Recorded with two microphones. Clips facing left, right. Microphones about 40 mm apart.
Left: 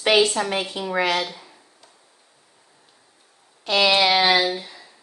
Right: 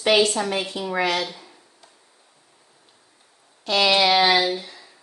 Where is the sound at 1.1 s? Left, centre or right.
Centre.